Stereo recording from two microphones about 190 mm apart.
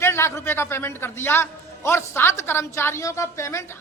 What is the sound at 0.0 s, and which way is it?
A man's voice, 15° left (ahead or behind).